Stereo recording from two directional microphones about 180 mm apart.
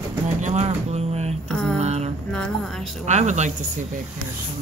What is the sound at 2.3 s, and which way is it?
Music, 5° left (ahead or behind).